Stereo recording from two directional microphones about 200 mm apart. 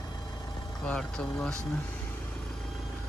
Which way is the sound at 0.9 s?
5° left (ahead or behind).